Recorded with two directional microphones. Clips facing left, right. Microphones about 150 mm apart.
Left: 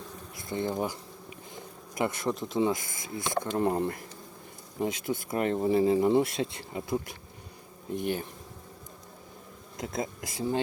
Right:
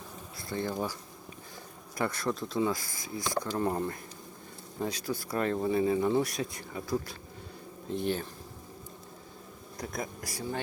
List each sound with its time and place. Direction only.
0.3 s speech: 20° left (ahead or behind)
9.7 s speech: 25° left (ahead or behind)